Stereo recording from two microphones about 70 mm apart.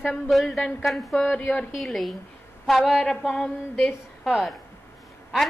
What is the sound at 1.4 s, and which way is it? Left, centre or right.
Speech, left.